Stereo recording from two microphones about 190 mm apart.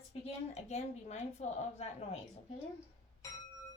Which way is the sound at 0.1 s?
35° left (ahead or behind).